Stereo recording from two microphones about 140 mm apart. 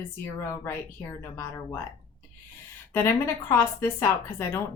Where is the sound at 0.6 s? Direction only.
15° left (ahead or behind).